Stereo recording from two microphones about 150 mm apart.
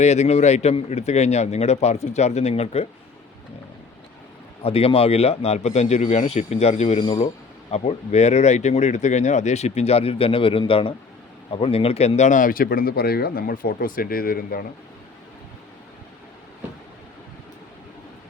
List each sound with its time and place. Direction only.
0.0 s speech: 50° left (ahead or behind)
4.6 s speech: 40° left (ahead or behind); by 14.7 s 80° left